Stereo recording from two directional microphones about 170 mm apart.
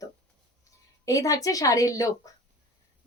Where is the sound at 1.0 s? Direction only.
20° left (ahead or behind).